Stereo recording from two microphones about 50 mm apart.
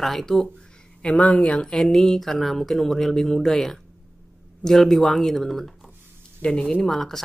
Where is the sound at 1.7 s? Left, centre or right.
Centre.